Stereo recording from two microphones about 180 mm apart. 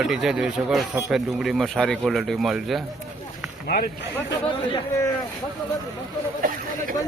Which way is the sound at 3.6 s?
55° left (ahead or behind).